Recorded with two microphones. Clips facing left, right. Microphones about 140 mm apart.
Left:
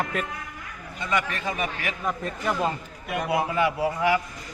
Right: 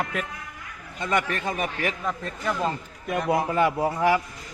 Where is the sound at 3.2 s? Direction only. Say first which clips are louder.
Right 1 dB; 40° right (ahead or behind).